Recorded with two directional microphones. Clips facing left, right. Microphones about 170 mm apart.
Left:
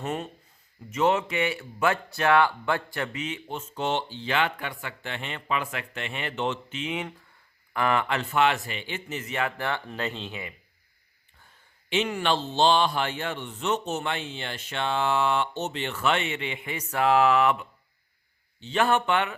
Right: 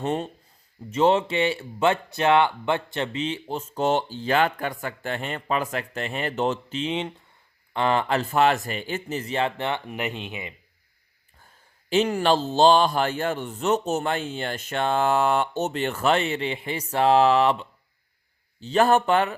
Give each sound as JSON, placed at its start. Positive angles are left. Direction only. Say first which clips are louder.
{"t": 0.0, "sound": "speech", "louder": "right 5 dB", "side_deg": -30}
{"t": 11.9, "sound": "speech", "louder": "right 5 dB", "side_deg": -40}